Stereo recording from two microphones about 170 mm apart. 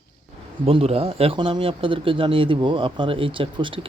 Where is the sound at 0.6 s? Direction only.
35° right (ahead or behind).